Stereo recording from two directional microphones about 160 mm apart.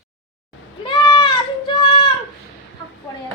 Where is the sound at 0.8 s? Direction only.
30° left (ahead or behind).